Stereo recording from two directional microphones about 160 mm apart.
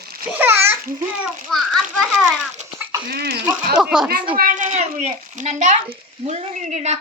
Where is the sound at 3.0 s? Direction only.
75° right (ahead or behind).